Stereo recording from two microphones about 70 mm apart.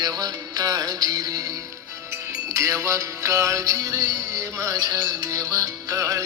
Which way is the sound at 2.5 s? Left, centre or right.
Right.